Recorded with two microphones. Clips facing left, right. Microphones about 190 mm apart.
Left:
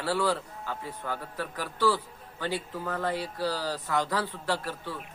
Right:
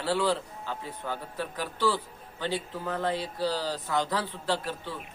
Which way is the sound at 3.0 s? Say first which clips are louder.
Right 1 dB; 20° right (ahead or behind).